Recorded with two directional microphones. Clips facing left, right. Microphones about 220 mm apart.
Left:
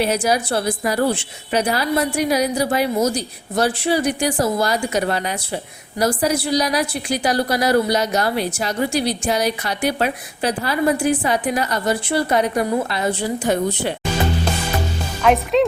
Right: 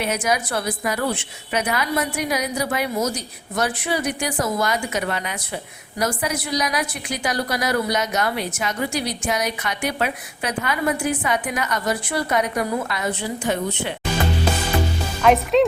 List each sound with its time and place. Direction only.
0.0 s a woman's voice: 30° left (ahead or behind)
15.2 s speech: centre (ahead or behind)